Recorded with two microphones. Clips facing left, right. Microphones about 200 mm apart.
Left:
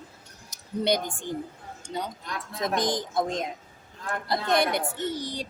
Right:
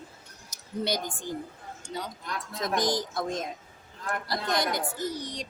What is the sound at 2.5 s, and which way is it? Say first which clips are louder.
A woman's voice: left 1 dB; 20° left (ahead or behind).